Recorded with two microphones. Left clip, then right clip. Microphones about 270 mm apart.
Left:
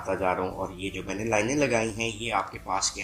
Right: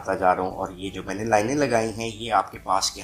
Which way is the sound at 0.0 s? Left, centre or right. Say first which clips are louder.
Right 5 dB; right.